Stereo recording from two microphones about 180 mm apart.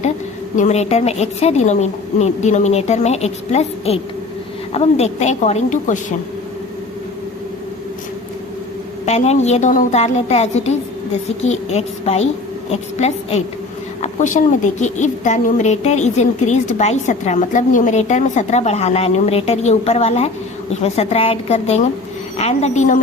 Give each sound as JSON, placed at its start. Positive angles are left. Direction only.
{"t": 0.5, "sound": "a woman's voice", "side_deg": 40}
{"t": 9.0, "sound": "a woman's voice", "side_deg": 35}